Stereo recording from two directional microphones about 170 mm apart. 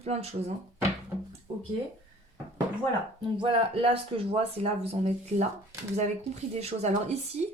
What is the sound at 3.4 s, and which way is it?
Speech, 35° right (ahead or behind).